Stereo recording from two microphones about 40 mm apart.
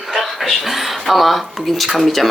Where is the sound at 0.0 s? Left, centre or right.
Centre.